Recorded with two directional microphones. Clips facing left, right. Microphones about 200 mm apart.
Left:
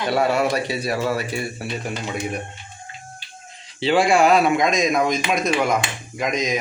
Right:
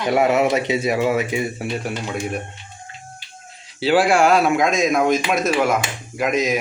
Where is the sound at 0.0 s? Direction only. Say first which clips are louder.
Right 3 dB; 15° right (ahead or behind).